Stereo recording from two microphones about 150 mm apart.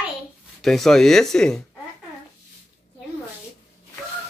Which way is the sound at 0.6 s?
Centre (ahead or behind).